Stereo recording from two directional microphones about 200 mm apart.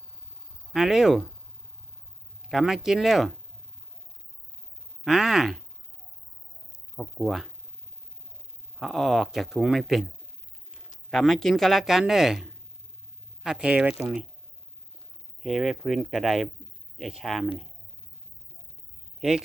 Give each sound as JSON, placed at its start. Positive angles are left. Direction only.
{"t": 0.7, "sound": "speech", "side_deg": 0}
{"t": 2.4, "sound": "speech", "side_deg": 0}
{"t": 5.0, "sound": "speech", "side_deg": 0}
{"t": 6.9, "sound": "speech", "side_deg": 0}
{"t": 8.8, "sound": "speech", "side_deg": 0}
{"t": 10.7, "sound": "mechanisms", "side_deg": 40}
{"t": 11.1, "sound": "speech", "side_deg": 0}
{"t": 15.4, "sound": "speech", "side_deg": 0}